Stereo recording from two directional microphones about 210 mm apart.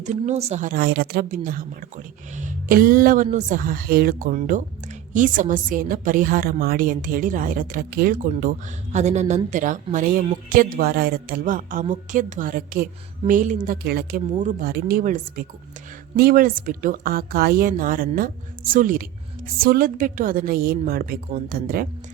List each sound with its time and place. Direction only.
0.0 s a woman's voice: 35° right (ahead or behind)